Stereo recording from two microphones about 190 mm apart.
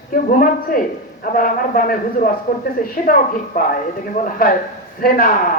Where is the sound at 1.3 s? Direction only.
45° left (ahead or behind).